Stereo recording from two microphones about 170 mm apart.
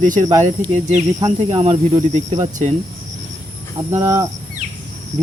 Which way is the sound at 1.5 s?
35° right (ahead or behind).